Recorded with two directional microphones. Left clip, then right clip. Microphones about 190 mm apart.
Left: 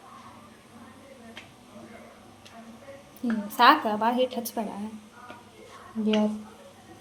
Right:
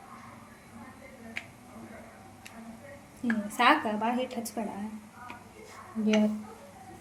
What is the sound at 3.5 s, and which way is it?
Speech, centre (ahead or behind).